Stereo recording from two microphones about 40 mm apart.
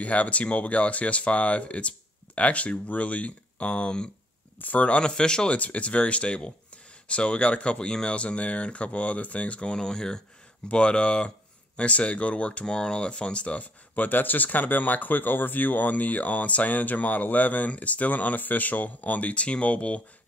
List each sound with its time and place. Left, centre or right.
0.0 s speech: left
4.6 s speech: left
5.5 s speech: left
13.9 s speech: left